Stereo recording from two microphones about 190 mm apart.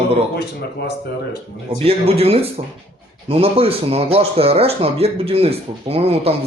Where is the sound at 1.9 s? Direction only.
30° right (ahead or behind).